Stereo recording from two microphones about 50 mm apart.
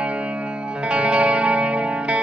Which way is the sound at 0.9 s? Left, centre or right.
Right.